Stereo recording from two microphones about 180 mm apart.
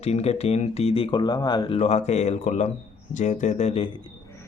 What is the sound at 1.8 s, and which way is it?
Speech, 40° left (ahead or behind).